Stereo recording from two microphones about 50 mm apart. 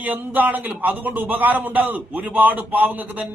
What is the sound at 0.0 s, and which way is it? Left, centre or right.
A man's voice, right.